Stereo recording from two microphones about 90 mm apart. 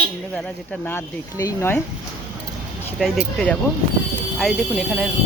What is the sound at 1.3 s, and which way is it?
Speech, 35° left (ahead or behind).